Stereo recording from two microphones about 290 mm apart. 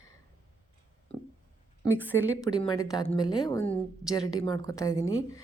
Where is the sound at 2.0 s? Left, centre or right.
Centre.